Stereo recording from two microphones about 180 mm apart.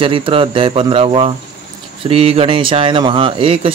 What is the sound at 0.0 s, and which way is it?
Speech, 30° right (ahead or behind).